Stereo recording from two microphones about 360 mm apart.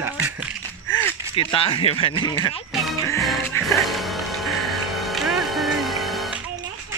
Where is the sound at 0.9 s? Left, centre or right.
Centre.